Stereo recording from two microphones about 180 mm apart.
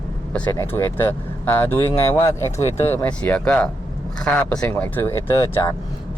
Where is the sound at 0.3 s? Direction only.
15° left (ahead or behind).